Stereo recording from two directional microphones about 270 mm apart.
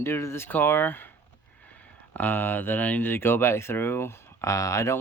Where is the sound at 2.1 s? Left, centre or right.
Centre.